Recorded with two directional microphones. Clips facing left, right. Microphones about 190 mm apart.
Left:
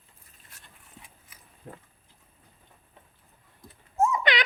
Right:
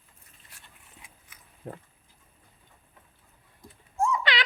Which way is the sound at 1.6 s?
55° right (ahead or behind).